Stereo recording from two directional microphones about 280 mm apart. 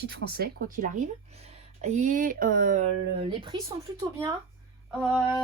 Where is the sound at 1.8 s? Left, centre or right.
Right.